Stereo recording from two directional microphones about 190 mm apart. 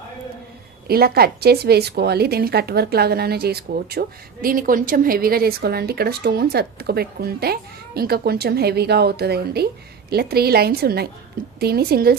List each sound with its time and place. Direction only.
0.9 s a woman's voice: 55° right (ahead or behind)